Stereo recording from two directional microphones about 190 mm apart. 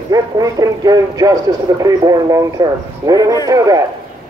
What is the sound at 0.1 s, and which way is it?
Speech, 20° right (ahead or behind).